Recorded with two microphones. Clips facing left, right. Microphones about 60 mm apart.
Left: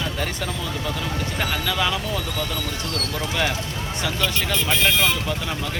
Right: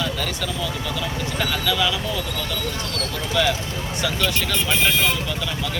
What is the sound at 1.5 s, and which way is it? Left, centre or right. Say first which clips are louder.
Speech: right 2 dB; left.